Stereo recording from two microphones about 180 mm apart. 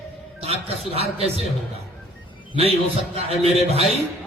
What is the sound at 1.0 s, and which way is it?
Speech, 35° right (ahead or behind).